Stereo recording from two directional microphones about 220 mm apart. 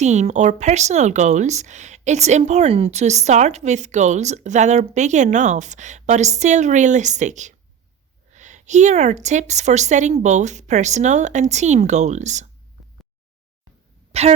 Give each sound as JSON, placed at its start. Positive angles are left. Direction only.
{"t": 0.0, "sound": "speech", "side_deg": -30}
{"t": 14.1, "sound": "speech", "side_deg": -30}